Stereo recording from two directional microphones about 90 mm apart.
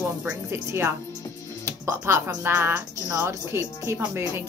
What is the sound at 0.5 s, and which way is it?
A woman's voice, 30° right (ahead or behind).